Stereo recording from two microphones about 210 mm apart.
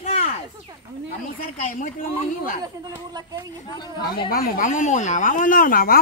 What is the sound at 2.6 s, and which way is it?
Speech, 15° right (ahead or behind).